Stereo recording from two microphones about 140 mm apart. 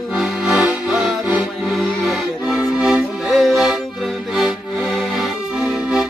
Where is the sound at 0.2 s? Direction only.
5° right (ahead or behind).